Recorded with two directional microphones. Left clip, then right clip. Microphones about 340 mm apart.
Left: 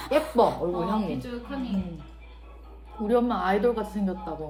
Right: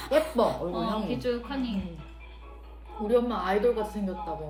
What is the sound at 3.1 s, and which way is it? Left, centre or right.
Speech, left.